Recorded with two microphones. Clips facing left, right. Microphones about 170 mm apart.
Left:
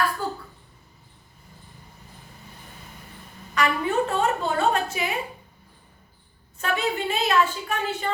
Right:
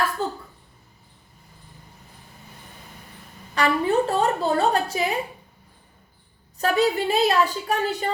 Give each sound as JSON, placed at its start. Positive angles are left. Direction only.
{"t": 0.2, "sound": "a sound", "side_deg": -25}
{"t": 3.5, "sound": "a woman's voice", "side_deg": -35}
{"t": 6.6, "sound": "a woman's voice", "side_deg": -35}